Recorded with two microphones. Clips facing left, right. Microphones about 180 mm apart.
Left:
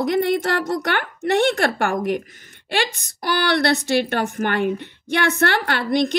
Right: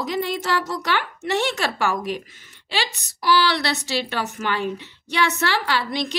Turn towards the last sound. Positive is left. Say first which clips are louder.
# left 5 dB
turn(degrees=55)  # may be behind; listen again after turning